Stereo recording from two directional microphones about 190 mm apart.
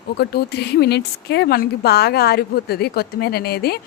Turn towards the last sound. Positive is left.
turn(degrees=55)  # may be behind; listen again after turning